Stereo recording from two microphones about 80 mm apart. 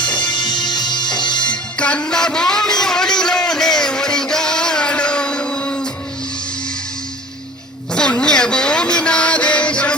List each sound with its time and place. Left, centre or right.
0.2 s music: left
1.4 s music: centre
7.9 s music: centre